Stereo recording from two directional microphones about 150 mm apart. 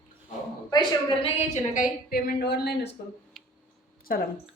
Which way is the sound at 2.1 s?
90° left.